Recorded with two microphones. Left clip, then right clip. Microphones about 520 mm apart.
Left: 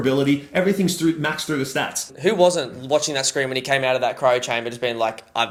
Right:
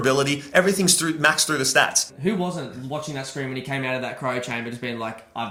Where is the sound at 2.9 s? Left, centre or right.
Left.